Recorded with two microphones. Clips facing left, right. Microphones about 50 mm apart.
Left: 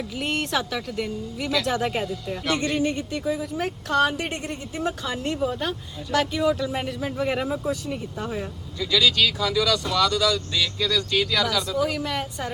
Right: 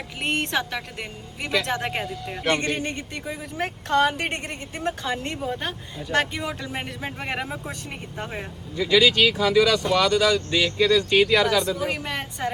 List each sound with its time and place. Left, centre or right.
0.2 s speech: right
5.5 s speech: right